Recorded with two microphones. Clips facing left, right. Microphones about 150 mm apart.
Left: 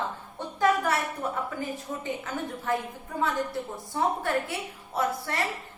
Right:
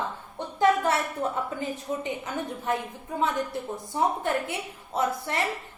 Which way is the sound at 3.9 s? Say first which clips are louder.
Right 1 dB; 20° right (ahead or behind).